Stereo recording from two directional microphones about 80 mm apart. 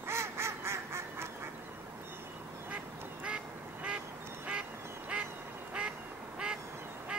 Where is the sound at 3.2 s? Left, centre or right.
Centre.